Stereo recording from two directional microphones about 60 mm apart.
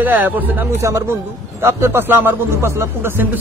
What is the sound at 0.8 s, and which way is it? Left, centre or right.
A man's voice, right.